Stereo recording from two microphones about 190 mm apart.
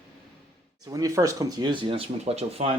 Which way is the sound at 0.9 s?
20° right (ahead or behind).